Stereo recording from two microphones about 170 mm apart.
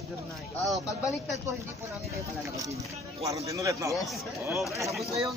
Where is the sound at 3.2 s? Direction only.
20° right (ahead or behind).